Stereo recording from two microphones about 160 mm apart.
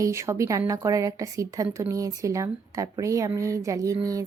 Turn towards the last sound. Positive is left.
turn(degrees=-20)  # may be behind; listen again after turning